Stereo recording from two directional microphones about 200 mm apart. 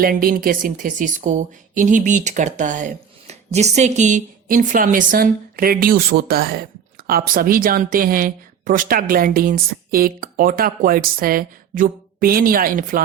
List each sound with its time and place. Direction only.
0.0 s speech: 45° right (ahead or behind)